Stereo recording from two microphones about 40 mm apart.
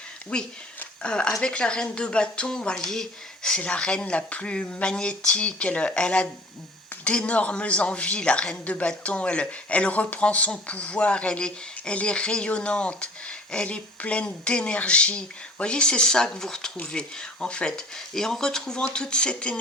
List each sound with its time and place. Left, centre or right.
0.3 s speech: left
2.7 s speech: centre
3.6 s speech: left
16.7 s speech: left
17.9 s speech: centre